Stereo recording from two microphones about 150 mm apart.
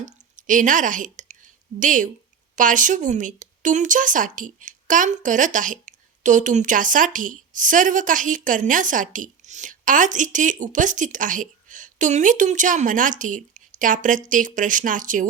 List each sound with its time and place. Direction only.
0.0 s a woman's voice: 60° right (ahead or behind)